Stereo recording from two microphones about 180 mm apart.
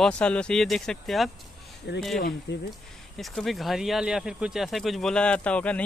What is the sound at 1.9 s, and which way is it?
Speech, 70° left (ahead or behind).